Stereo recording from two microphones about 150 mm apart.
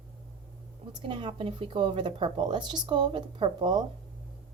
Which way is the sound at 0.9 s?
35° right (ahead or behind).